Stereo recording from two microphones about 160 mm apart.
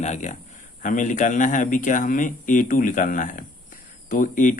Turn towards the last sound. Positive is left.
turn(degrees=55)  # may be behind; listen again after turning